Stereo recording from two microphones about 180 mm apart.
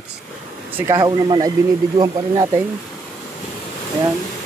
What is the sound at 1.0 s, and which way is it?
Speech, 20° right (ahead or behind).